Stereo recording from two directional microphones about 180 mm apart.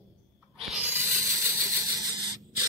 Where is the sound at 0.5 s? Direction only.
Centre (ahead or behind); by 2.1 s 20° right (ahead or behind).